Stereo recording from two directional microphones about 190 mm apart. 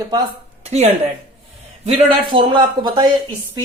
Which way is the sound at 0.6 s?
35° right (ahead or behind).